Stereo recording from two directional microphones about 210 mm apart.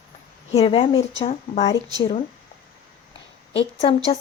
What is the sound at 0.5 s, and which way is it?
Speech, 25° left (ahead or behind).